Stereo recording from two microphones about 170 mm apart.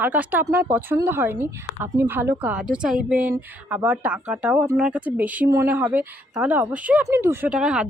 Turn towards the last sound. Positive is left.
turn(degrees=-5)  # may be behind; listen again after turning